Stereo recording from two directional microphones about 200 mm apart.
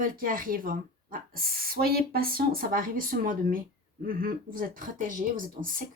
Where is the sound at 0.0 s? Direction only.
45° right (ahead or behind).